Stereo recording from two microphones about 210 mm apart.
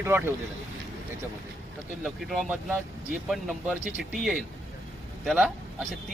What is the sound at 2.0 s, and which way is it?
Speech, centre (ahead or behind).